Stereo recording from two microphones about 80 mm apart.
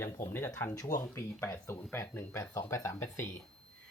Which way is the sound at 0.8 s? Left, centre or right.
Left.